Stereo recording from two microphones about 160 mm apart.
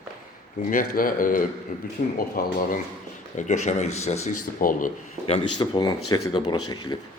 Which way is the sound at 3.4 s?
45° left (ahead or behind).